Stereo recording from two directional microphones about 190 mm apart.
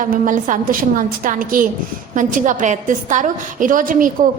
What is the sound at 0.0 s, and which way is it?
A woman's voice, 45° right (ahead or behind).